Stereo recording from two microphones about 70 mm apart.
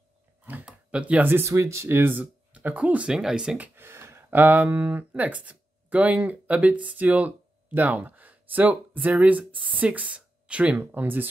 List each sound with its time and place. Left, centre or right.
0.7 s a sound: centre
1.3 s speech: right
2.1 s speech: right
3.1 s speech: centre
3.7 s a sound: right
4.3 s speech: right
10.8 s speech: right